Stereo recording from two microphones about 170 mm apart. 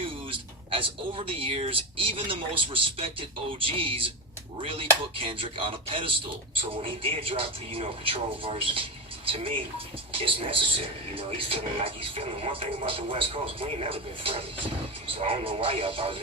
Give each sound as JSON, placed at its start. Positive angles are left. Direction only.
{"t": 0.3, "sound": "speech", "side_deg": -30}